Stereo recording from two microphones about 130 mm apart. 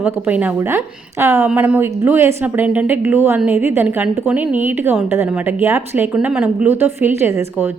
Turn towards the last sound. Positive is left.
turn(degrees=-20)  # may be behind; listen again after turning